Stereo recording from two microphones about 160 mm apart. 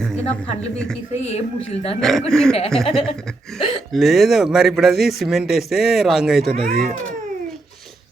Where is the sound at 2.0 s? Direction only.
Centre (ahead or behind).